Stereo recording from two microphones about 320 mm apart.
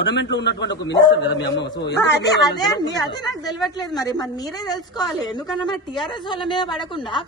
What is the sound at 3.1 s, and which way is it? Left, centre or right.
A woman's voice, centre.